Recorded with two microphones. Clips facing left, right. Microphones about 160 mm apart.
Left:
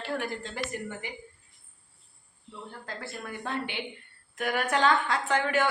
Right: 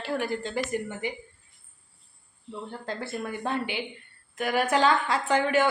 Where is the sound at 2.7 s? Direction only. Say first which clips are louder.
Right 6 dB; 25° right (ahead or behind).